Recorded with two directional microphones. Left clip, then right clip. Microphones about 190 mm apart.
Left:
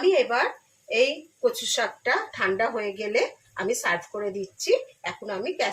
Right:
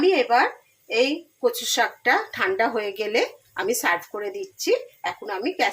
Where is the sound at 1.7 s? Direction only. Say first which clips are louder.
Right 4 dB; 55° right (ahead or behind).